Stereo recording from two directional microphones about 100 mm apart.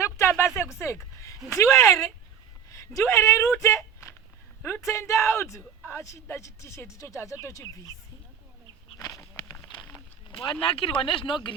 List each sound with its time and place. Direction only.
0.0 s a sound: 25° left (ahead or behind)
1.5 s speech: 30° left (ahead or behind)
3.1 s speech: 30° left (ahead or behind)
3.6 s a sound: 30° left (ahead or behind)
4.6 s speech: 25° left (ahead or behind)
9.0 s walk: 40° left (ahead or behind)
9.9 s speech: 60° left (ahead or behind)